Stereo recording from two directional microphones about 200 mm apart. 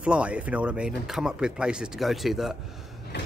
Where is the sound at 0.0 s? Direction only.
5° right (ahead or behind).